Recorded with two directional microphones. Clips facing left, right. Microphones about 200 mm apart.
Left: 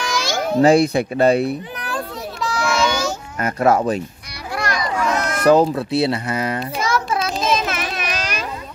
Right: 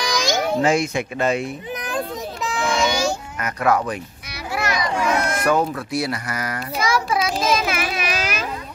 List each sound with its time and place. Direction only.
0.0 s meow: 15° right (ahead or behind)
0.6 s speech: 35° left (ahead or behind)
1.8 s a sound: 20° right (ahead or behind)
3.3 s speech: 30° left (ahead or behind)
4.6 s children playing: 5° right (ahead or behind)
5.4 s speech: 25° left (ahead or behind)
6.8 s a sound: centre (ahead or behind)